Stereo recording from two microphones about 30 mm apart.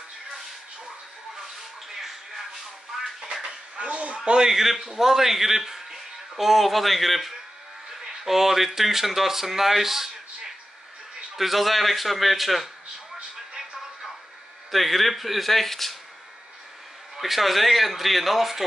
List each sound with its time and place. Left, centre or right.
2.0 s music: centre
3.4 s a sound: right
4.5 s a man's voice: centre
14.7 s a man's voice: centre
17.2 s a man's voice: centre